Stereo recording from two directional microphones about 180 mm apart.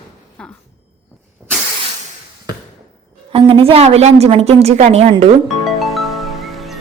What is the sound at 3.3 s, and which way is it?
A woman's voice, 30° right (ahead or behind).